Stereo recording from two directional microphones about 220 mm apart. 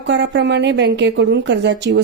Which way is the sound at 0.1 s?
55° right (ahead or behind).